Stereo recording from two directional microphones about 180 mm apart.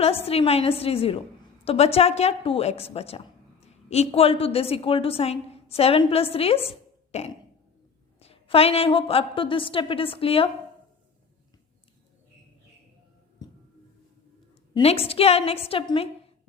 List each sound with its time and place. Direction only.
0.0 s a woman's voice: 35° left (ahead or behind)
13.4 s music: 20° left (ahead or behind)
14.7 s a woman's voice: 35° left (ahead or behind)